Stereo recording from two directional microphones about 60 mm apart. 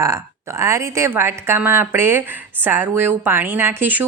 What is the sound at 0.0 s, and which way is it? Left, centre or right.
Speech, right.